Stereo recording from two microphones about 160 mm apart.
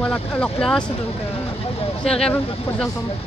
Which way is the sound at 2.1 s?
5° left (ahead or behind).